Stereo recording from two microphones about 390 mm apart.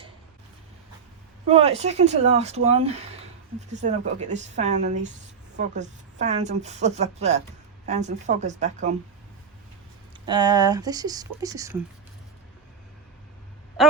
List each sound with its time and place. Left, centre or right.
1.5 s a woman's voice: centre
10.2 s a woman's voice: centre